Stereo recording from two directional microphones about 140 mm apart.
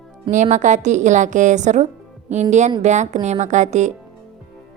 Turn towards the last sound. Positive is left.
turn(degrees=-55)  # may be behind; listen again after turning